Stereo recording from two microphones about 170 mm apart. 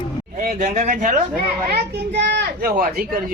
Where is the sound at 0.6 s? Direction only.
45° right (ahead or behind).